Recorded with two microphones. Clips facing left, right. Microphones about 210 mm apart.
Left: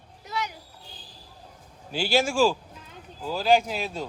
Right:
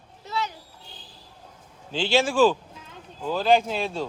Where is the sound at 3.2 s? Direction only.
5° left (ahead or behind).